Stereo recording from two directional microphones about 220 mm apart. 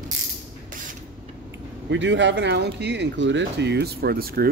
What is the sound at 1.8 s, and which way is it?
Speech, 55° right (ahead or behind).